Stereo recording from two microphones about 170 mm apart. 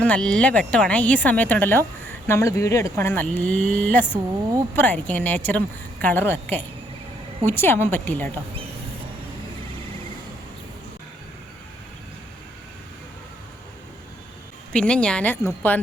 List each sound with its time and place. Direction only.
0.0 s speech: 5° left (ahead or behind)
14.7 s speech: 5° left (ahead or behind)